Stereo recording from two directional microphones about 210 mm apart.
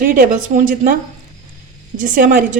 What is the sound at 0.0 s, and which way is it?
Speech, 40° right (ahead or behind).